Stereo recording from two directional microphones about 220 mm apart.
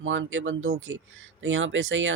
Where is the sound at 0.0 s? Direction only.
60° right (ahead or behind).